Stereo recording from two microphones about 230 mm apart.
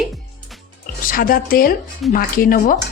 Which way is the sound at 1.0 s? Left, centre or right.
Left.